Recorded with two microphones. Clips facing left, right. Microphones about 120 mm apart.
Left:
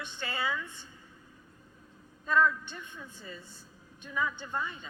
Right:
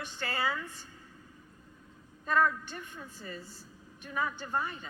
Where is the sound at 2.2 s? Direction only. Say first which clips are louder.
Left 1 dB; 60° right (ahead or behind).